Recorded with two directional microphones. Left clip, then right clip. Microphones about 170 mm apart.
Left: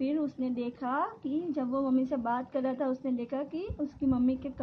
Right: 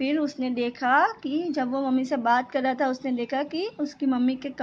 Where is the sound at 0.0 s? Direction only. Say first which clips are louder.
Right 6 dB; 20° right (ahead or behind).